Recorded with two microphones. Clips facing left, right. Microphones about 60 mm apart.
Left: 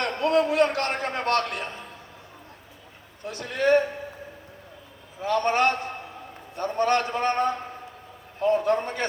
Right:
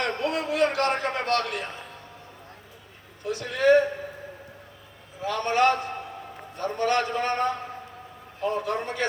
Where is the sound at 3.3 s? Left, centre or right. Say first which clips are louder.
Right 2 dB; left.